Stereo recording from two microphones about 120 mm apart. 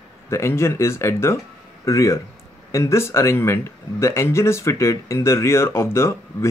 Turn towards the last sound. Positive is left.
turn(degrees=20)  # may be behind; listen again after turning